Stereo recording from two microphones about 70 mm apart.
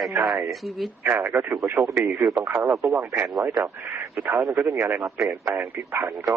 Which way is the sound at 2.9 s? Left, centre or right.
Right.